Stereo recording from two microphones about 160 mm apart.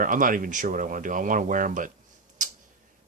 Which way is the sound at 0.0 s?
60° right (ahead or behind).